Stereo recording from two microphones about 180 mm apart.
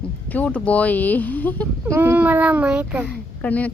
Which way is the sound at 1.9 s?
10° right (ahead or behind).